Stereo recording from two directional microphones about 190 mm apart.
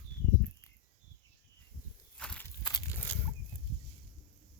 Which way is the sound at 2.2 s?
5° left (ahead or behind).